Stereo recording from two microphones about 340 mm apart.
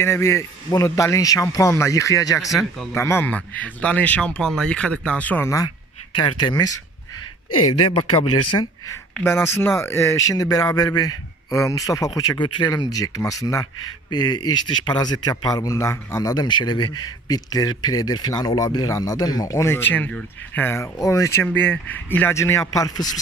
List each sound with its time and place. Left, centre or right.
0.0 s speech: centre
7.8 s speech: centre
9.2 s speech: centre